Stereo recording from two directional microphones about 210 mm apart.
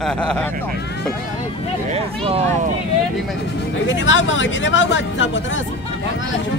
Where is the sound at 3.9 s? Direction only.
65° left (ahead or behind).